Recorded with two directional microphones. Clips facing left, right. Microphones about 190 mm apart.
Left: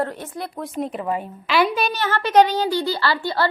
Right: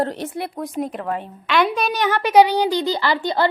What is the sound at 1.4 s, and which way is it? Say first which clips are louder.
Speech: even; 5° left (ahead or behind).